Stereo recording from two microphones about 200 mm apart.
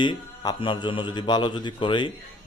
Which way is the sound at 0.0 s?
25° left (ahead or behind).